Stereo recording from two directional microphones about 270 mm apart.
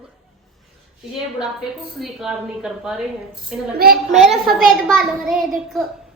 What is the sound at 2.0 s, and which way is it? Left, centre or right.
A child's voice, centre.